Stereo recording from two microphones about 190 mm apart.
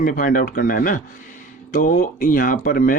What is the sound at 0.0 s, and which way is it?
Speech, 45° left (ahead or behind).